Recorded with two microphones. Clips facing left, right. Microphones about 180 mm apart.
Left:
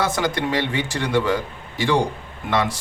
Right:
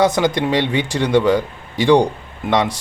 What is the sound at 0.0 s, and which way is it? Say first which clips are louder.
Speech: right 6 dB; 15° right (ahead or behind).